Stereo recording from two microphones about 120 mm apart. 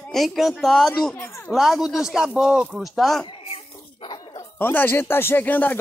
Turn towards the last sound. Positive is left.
turn(degrees=15)  # may be behind; listen again after turning